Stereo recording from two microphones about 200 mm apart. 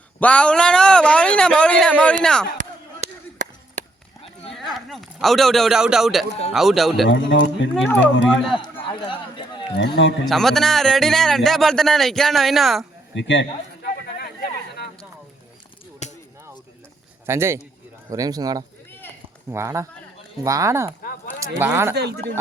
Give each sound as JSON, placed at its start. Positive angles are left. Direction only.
{"t": 0.2, "sound": "a man's voice", "side_deg": 5}
{"t": 2.6, "sound": "chop", "side_deg": -40}
{"t": 4.5, "sound": "a man's voice", "side_deg": 0}
{"t": 7.1, "sound": "speech", "side_deg": 65}
{"t": 8.8, "sound": "run", "side_deg": 25}
{"t": 9.7, "sound": "speech", "side_deg": 65}
{"t": 10.2, "sound": "a man's voice", "side_deg": 0}
{"t": 13.1, "sound": "a sound", "side_deg": 65}
{"t": 16.0, "sound": "a sound", "side_deg": 35}
{"t": 17.2, "sound": "speech", "side_deg": -15}
{"t": 21.9, "sound": "speech", "side_deg": -55}